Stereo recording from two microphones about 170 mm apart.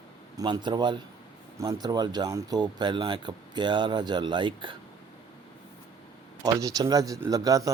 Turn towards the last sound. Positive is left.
turn(degrees=-20)  # may be behind; listen again after turning